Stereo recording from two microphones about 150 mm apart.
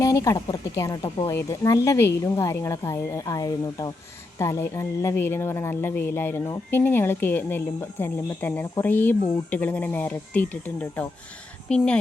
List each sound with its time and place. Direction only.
0.0 s speech: 25° left (ahead or behind)